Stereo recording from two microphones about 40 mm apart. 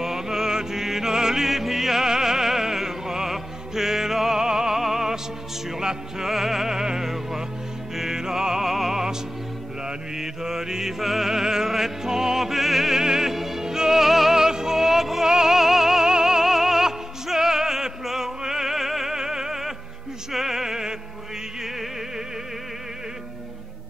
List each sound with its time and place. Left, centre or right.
0.0 s music: centre